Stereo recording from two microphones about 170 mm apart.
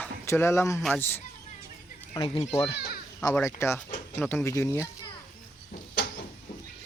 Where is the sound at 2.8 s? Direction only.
65° left (ahead or behind).